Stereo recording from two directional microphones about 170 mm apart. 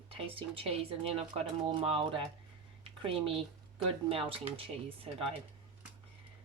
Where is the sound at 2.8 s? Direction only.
35° right (ahead or behind).